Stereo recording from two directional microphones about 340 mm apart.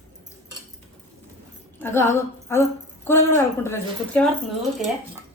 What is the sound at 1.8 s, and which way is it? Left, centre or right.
A woman's voice, centre.